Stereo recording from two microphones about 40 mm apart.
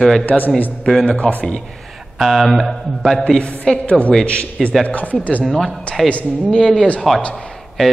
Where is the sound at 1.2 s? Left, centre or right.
Left.